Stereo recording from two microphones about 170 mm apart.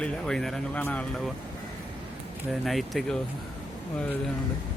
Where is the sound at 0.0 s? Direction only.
5° left (ahead or behind).